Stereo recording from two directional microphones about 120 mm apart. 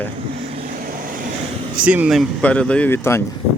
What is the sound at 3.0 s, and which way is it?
Speech, 20° left (ahead or behind).